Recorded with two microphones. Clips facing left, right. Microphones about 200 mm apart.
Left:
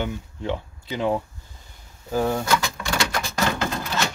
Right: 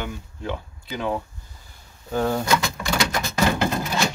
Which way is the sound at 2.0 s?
5° left (ahead or behind).